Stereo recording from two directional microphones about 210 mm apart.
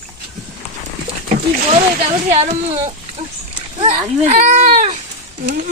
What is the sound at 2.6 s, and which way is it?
Speech, 20° right (ahead or behind).